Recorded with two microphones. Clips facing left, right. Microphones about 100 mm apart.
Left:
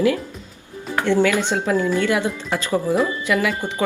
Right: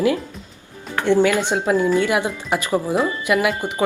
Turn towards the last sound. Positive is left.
turn(degrees=-15)  # may be behind; listen again after turning